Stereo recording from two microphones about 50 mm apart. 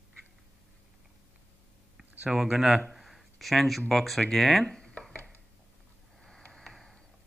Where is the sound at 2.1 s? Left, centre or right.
Right.